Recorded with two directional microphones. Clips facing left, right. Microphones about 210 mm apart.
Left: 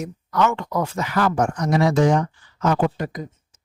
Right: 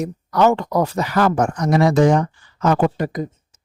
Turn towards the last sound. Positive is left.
turn(degrees=-55)  # may be behind; listen again after turning